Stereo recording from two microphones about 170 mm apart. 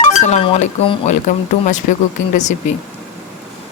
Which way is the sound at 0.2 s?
40° left (ahead or behind).